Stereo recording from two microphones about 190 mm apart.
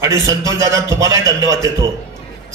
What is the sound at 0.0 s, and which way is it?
A man's voice, 15° right (ahead or behind).